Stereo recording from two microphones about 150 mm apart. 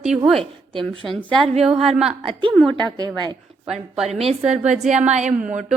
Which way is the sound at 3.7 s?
Centre (ahead or behind).